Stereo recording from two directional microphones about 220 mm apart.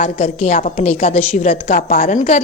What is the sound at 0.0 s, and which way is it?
A woman's voice, 35° left (ahead or behind).